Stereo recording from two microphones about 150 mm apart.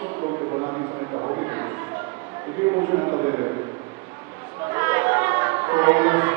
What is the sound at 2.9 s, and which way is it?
Speech, 25° right (ahead or behind).